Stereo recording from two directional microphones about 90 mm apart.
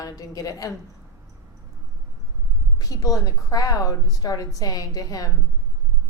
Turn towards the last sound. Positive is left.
turn(degrees=40)  # may be behind; listen again after turning